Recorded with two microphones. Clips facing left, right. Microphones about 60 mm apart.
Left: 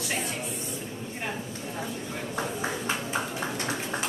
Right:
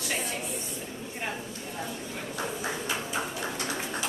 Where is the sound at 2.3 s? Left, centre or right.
Left.